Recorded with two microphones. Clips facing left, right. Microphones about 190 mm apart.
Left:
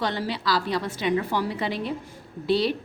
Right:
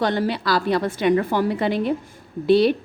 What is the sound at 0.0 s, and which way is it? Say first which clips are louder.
A woman's voice: right 6 dB; 55° right (ahead or behind).